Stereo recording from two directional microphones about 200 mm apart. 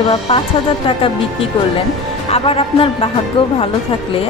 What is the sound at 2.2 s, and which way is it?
Speech, 30° left (ahead or behind).